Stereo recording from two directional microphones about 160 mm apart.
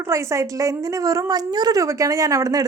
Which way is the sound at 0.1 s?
20° right (ahead or behind).